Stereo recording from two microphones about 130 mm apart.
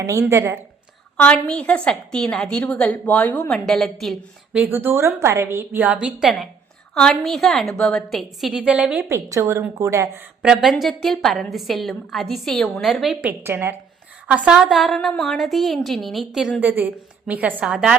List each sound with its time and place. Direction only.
0.1 s a woman's voice: 20° right (ahead or behind)
1.1 s a woman's voice: 10° left (ahead or behind)
4.5 s a woman's voice: 15° right (ahead or behind)
9.0 s a woman's voice: 20° right (ahead or behind)
10.4 s a woman's voice: 5° right (ahead or behind)
13.2 s a woman's voice: 15° right (ahead or behind)
16.6 s a woman's voice: 15° right (ahead or behind)